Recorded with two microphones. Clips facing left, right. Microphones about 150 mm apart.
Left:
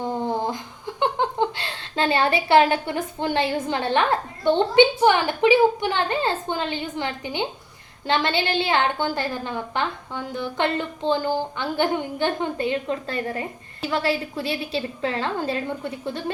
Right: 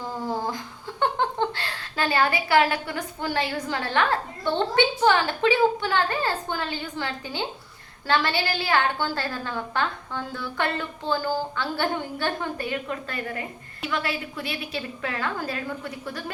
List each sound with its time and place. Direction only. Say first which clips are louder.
0.0 s a woman's voice: left 4 dB; 25° left (ahead or behind)